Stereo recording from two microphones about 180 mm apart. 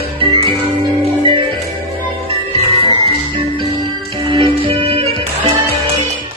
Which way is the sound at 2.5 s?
30° right (ahead or behind).